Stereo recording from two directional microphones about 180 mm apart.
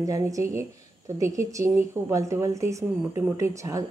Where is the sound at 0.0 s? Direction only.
20° right (ahead or behind).